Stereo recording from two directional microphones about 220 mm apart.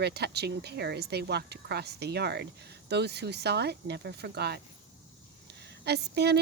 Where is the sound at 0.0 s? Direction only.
50° right (ahead or behind).